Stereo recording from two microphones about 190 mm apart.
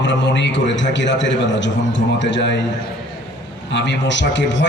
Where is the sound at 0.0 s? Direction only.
70° left (ahead or behind).